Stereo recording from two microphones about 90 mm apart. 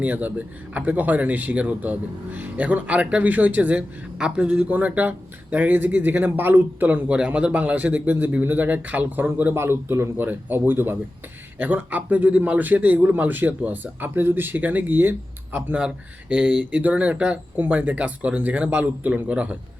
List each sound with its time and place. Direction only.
0.0 s speech: 15° right (ahead or behind)
9.6 s a man's voice: 30° right (ahead or behind)